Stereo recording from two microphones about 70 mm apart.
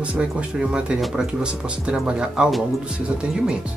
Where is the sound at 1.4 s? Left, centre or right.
Centre.